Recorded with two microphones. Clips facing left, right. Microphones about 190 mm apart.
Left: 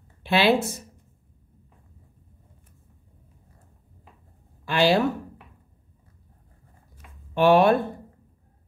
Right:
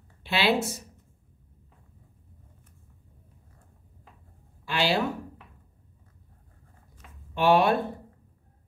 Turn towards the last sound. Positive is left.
turn(degrees=50)  # may be behind; listen again after turning